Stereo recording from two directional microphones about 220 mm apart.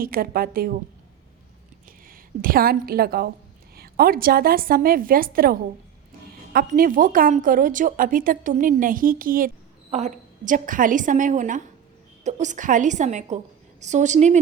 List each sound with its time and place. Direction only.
0.0 s a woman's voice: 40° right (ahead or behind)
2.0 s a woman's voice: 40° right (ahead or behind)